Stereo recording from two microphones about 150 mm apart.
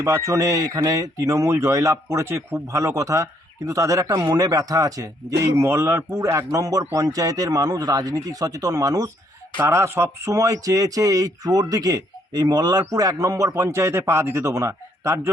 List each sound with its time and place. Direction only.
0.0 s speech: 20° right (ahead or behind)